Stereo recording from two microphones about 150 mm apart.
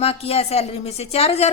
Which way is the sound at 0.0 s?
40° left (ahead or behind).